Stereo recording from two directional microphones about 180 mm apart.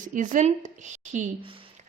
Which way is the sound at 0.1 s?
45° right (ahead or behind).